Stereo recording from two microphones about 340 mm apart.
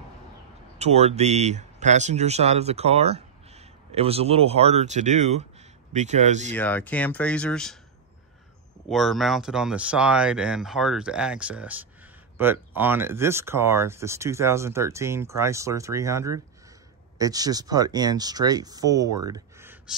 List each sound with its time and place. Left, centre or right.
0.7 s speech: centre
6.5 s speech: centre
8.9 s speech: centre